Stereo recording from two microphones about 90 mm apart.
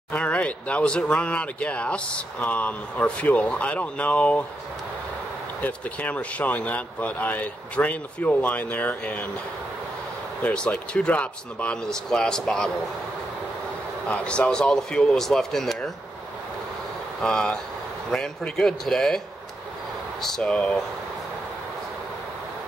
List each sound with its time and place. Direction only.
0.1 s speech: 15° left (ahead or behind)
5.6 s speech: 15° left (ahead or behind)
10.4 s speech: 15° left (ahead or behind)
14.0 s speech: 10° left (ahead or behind)
17.2 s speech: 10° left (ahead or behind)